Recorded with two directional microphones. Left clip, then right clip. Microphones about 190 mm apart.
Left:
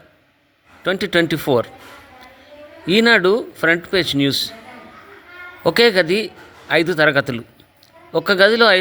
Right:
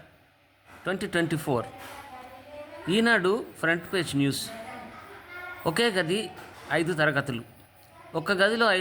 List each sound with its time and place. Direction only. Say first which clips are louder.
0.9 s a man's voice: left 10 dB; 30° left (ahead or behind)
2.8 s a man's voice: left 10 dB; 25° left (ahead or behind)
5.6 s a man's voice: left 12 dB; 30° left (ahead or behind)